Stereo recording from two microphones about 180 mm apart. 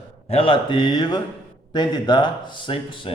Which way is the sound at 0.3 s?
30° left (ahead or behind).